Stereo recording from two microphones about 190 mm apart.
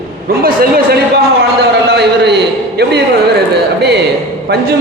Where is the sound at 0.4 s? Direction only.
55° right (ahead or behind).